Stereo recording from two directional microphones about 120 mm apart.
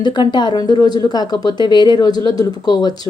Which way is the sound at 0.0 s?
40° left (ahead or behind).